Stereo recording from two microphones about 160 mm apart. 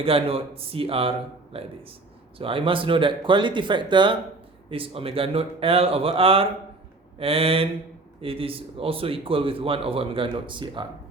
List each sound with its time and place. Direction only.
0.0 s speech: 35° right (ahead or behind)